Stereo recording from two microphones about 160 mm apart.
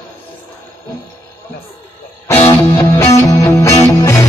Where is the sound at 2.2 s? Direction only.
15° left (ahead or behind).